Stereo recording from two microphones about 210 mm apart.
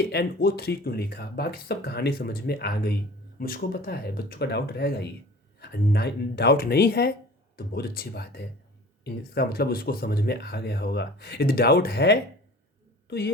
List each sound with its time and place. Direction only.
0.0 s a woman's voice: 50° left (ahead or behind)